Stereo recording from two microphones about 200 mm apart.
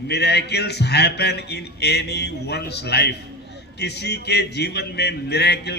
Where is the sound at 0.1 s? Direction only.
55° left (ahead or behind).